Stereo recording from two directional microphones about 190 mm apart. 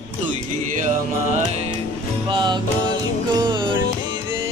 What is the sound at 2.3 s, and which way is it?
Music, 25° right (ahead or behind).